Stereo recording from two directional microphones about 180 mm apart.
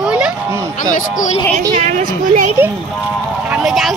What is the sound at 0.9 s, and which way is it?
Speech, 45° left (ahead or behind).